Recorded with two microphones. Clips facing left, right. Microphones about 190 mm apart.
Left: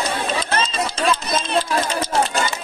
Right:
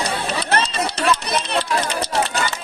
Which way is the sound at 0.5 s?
70° right (ahead or behind).